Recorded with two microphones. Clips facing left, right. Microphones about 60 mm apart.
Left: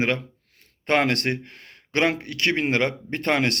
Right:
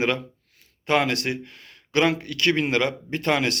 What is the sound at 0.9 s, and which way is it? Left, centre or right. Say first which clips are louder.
A man's voice: left 1 dB; left.